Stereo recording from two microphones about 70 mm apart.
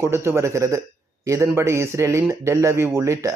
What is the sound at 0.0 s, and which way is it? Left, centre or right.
Speech, right.